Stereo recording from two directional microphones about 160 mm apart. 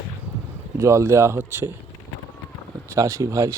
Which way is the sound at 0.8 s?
20° right (ahead or behind).